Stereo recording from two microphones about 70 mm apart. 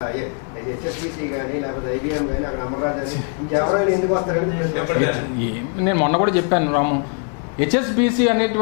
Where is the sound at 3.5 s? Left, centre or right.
Left.